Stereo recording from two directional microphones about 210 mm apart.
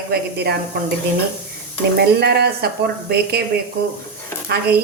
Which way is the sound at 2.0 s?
50° right (ahead or behind).